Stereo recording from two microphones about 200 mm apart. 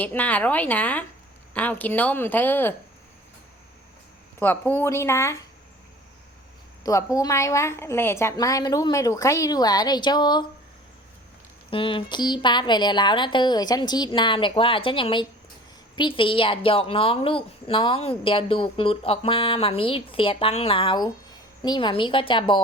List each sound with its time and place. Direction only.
0.0 s a woman's voice: 10° left (ahead or behind)
4.4 s a woman's voice: 10° left (ahead or behind)
6.8 s a woman's voice: 15° left (ahead or behind)
11.7 s a woman's voice: 25° left (ahead or behind)